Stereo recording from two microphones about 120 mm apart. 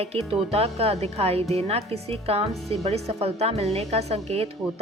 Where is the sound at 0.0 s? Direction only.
55° right (ahead or behind).